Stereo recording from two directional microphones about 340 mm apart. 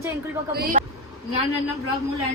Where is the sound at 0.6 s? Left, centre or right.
Right.